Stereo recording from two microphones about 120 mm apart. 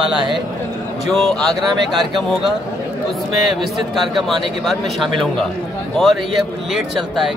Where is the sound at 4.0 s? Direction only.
Centre (ahead or behind).